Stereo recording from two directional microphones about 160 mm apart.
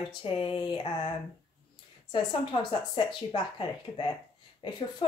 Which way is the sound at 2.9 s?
30° left (ahead or behind).